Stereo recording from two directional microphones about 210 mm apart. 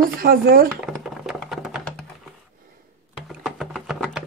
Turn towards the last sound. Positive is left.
turn(degrees=0)  # may be behind; listen again after turning